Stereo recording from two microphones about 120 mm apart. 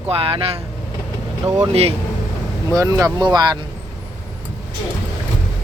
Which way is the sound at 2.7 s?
30° right (ahead or behind).